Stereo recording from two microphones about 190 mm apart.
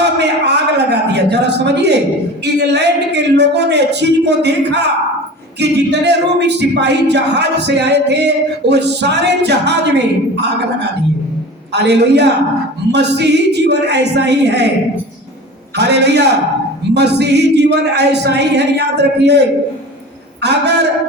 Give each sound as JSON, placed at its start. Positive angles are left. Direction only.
{"t": 0.0, "sound": "a sound", "side_deg": -60}
{"t": 2.4, "sound": "speech", "side_deg": -60}
{"t": 15.7, "sound": "speech", "side_deg": -60}
{"t": 20.4, "sound": "speech", "side_deg": -60}